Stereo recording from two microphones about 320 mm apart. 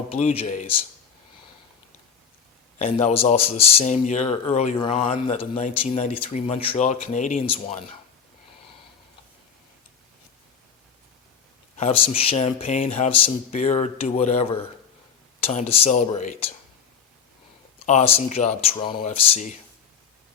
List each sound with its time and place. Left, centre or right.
0.1 s speech: centre
2.7 s speech: left
11.8 s speech: centre
17.8 s speech: centre